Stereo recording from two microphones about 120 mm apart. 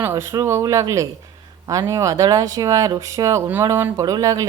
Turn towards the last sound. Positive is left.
turn(degrees=-30)  # may be behind; listen again after turning